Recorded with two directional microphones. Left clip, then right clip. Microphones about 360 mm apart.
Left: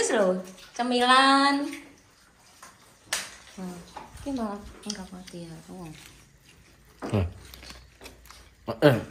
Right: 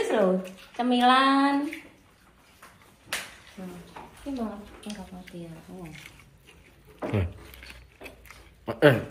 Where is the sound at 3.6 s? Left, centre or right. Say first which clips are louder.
Left 2 dB; centre.